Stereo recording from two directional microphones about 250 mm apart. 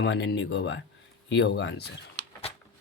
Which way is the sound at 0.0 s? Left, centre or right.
Left.